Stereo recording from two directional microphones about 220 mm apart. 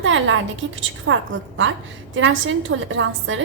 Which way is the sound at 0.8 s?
60° right (ahead or behind).